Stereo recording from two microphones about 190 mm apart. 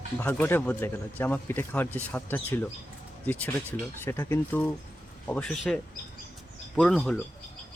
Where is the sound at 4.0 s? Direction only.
10° left (ahead or behind).